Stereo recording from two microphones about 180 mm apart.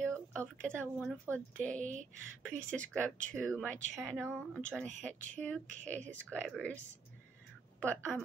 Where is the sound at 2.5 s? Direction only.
5° left (ahead or behind).